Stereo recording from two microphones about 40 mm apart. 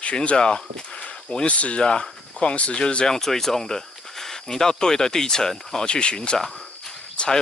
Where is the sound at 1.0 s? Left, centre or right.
Left.